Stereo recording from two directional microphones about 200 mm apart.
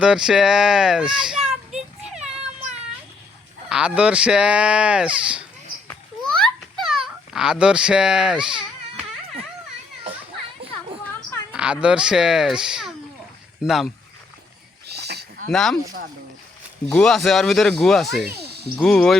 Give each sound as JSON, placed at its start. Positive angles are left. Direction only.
{"t": 0.0, "sound": "a child's voice", "side_deg": -5}
{"t": 2.1, "sound": "a sound", "side_deg": -35}
{"t": 3.7, "sound": "speech", "side_deg": -5}
{"t": 5.9, "sound": "a sound", "side_deg": 5}
{"t": 11.5, "sound": "speech", "side_deg": -5}
{"t": 14.8, "sound": "livestock", "side_deg": -55}
{"t": 15.5, "sound": "speech", "side_deg": 0}
{"t": 16.8, "sound": "speech", "side_deg": 5}